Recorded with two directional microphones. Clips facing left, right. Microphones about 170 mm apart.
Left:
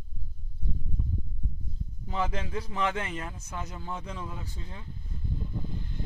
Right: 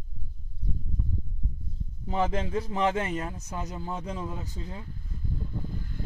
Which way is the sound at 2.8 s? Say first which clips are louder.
Right 4 dB; 40° right (ahead or behind).